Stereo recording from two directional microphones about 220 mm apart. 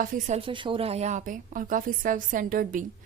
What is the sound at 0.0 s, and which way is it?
A woman's voice, 35° right (ahead or behind).